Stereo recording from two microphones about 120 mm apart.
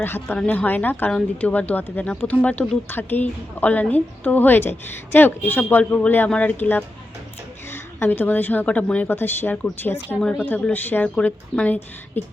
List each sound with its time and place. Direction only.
0.0 s a woman's voice: 20° left (ahead or behind)